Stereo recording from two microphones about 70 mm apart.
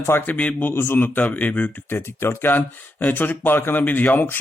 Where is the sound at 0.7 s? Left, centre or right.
Left.